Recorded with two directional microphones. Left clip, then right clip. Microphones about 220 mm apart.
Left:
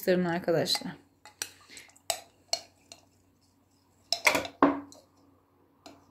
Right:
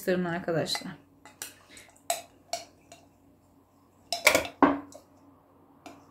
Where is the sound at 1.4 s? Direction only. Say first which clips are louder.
Left 4 dB; 30° left (ahead or behind).